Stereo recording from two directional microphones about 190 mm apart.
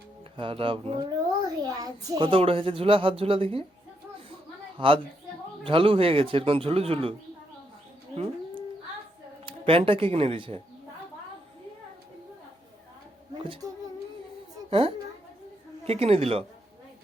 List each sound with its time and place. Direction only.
0.3 s a child's voice: 30° right (ahead or behind)
4.8 s a child's voice: 25° right (ahead or behind)
8.1 s dog: 30° right (ahead or behind)
9.5 s a child's voice: 30° right (ahead or behind)
13.4 s speech: 25° right (ahead or behind)
14.7 s a woman's voice: 30° right (ahead or behind)